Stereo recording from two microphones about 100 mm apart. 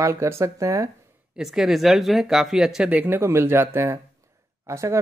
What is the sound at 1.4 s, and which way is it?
Speech, 5° right (ahead or behind).